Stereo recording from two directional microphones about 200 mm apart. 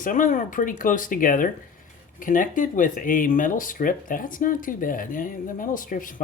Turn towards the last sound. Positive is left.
turn(degrees=40)  # may be behind; listen again after turning